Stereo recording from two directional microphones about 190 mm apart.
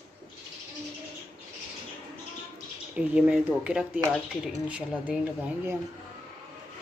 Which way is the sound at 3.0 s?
5° right (ahead or behind).